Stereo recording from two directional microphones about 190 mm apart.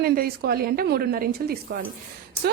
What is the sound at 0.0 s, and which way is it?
A woman's voice, 55° right (ahead or behind).